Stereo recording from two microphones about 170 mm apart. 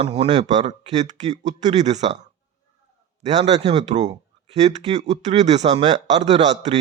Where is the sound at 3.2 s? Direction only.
40° right (ahead or behind).